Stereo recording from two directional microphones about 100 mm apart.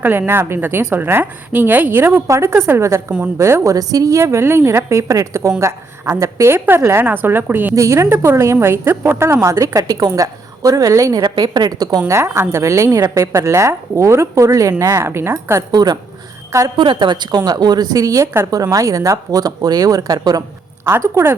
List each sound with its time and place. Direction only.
0.0 s a woman's voice: 25° right (ahead or behind)
15.7 s a woman's voice: 40° right (ahead or behind)
16.7 s a woman's voice: 50° right (ahead or behind)
20.8 s a woman's voice: 25° right (ahead or behind)